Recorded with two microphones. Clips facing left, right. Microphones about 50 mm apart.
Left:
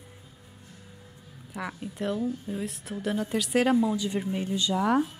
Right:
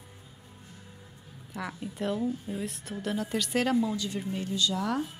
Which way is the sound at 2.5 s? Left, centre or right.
Centre.